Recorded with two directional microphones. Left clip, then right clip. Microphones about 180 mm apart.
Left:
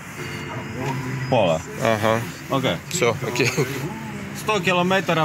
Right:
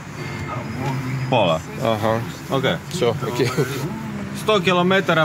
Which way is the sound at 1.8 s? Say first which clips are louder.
Left 1 dB; centre (ahead or behind).